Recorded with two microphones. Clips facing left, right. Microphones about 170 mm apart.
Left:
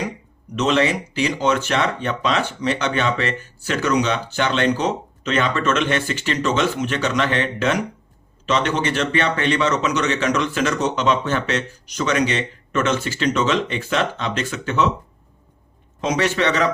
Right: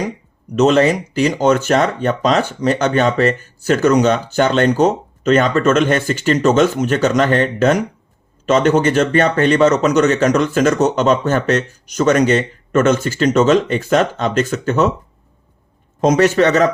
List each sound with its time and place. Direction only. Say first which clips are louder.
0.5 s speech: right 7 dB; 45° right (ahead or behind)
16.0 s speech: right 8 dB; 45° right (ahead or behind)